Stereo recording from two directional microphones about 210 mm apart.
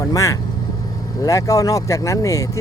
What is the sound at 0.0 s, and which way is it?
Speech, 15° left (ahead or behind).